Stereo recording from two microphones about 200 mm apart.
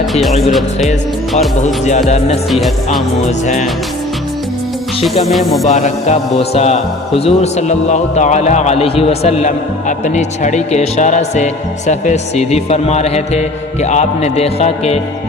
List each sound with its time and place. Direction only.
0.0 s speech: centre (ahead or behind)
1.6 s a man's voice: 35° left (ahead or behind)
2.5 s music: centre (ahead or behind)
3.2 s a man's voice: 35° left (ahead or behind)
5.2 s music: centre (ahead or behind)
5.6 s a man's voice: 35° left (ahead or behind)